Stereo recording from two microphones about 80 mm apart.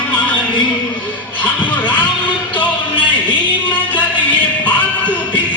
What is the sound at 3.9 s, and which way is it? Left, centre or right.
Music, left.